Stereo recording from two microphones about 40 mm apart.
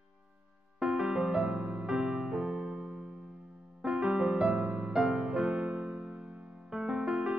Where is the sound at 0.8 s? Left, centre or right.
Centre.